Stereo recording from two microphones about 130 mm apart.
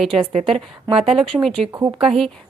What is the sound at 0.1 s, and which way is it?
A woman's voice, 40° right (ahead or behind).